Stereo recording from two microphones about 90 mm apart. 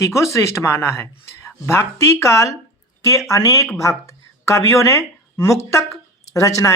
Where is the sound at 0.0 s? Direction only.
35° left (ahead or behind).